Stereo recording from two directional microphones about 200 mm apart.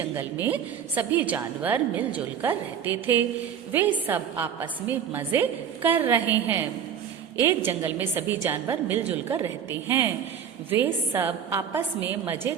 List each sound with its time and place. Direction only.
0.2 s a woman's voice: 10° right (ahead or behind)
10.7 s a woman's voice: 10° right (ahead or behind)